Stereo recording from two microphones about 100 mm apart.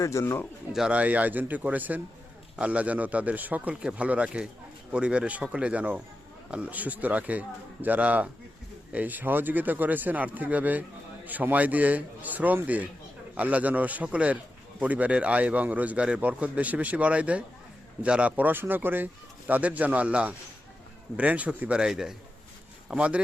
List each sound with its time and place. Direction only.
0.0 s speech: 30° left (ahead or behind)
0.7 s a man's voice: 10° right (ahead or behind)